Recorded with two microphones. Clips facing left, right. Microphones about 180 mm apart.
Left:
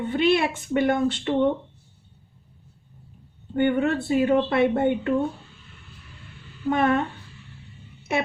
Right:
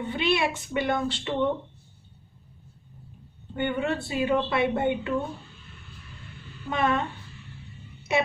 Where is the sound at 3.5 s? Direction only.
50° left (ahead or behind).